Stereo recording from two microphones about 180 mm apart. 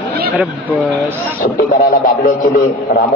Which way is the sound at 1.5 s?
50° left (ahead or behind).